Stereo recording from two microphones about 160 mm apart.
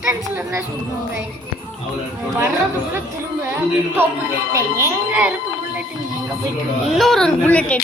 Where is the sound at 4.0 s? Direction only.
15° right (ahead or behind).